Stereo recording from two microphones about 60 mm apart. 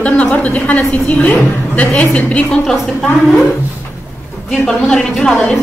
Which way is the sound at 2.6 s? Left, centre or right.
Centre.